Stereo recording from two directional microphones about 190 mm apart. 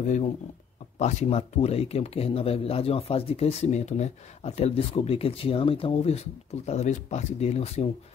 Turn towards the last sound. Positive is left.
turn(degrees=35)  # may be behind; listen again after turning